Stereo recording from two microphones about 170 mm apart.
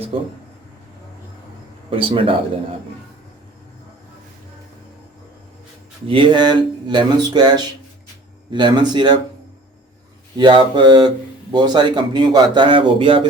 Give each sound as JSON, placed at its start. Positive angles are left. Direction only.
{"t": 0.1, "sound": "speech", "side_deg": -35}
{"t": 1.9, "sound": "speech", "side_deg": -30}
{"t": 6.1, "sound": "a man's voice", "side_deg": -30}
{"t": 10.3, "sound": "a man's voice", "side_deg": -25}